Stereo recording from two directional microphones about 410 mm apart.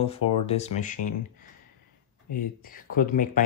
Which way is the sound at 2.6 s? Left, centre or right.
Left.